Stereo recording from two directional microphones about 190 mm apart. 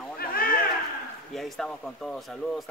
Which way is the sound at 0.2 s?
50° left (ahead or behind).